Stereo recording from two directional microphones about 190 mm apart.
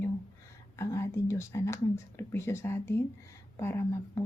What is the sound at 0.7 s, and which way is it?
Speech, 15° left (ahead or behind).